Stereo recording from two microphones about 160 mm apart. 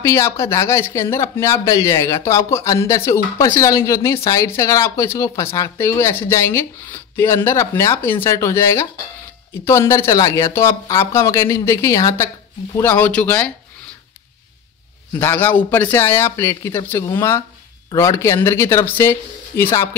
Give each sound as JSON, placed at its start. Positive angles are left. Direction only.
{"t": 0.0, "sound": "speech", "side_deg": 15}
{"t": 15.1, "sound": "speech", "side_deg": 15}